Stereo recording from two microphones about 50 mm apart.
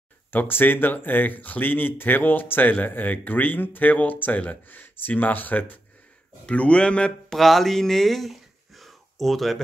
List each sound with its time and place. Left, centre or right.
0.3 s a man's voice: left
7.3 s speech: centre